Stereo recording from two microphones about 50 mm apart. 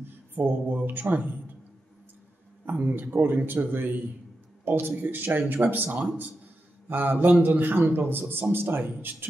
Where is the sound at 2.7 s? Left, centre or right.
Right.